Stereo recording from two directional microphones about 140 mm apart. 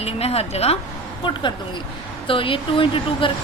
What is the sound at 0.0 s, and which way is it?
Speech, 45° left (ahead or behind).